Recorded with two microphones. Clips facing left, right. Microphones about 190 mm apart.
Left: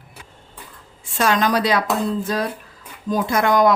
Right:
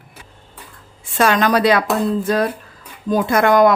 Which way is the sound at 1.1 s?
65° right (ahead or behind).